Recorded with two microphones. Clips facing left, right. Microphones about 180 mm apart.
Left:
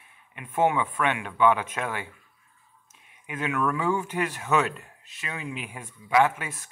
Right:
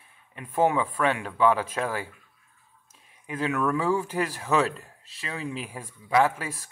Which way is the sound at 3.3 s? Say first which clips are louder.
Right 1 dB; 35° right (ahead or behind).